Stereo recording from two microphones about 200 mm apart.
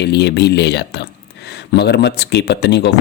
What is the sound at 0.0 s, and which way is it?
Speech, 55° left (ahead or behind).